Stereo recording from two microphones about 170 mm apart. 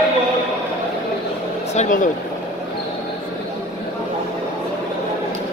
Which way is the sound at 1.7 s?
50° left (ahead or behind).